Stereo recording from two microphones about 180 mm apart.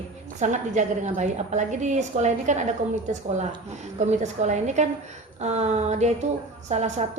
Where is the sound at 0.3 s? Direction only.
40° right (ahead or behind).